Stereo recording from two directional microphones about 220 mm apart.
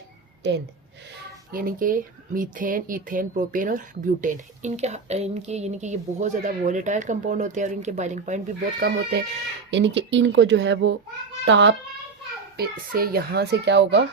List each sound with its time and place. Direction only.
1.5 s speech: 40° right (ahead or behind)
8.8 s a child's voice: 50° right (ahead or behind)
12.5 s a child's voice: 45° right (ahead or behind)